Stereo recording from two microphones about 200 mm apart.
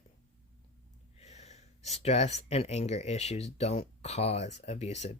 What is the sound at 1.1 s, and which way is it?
Speech, 35° left (ahead or behind).